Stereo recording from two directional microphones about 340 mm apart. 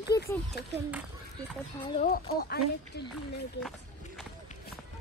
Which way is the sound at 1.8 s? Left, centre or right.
Centre.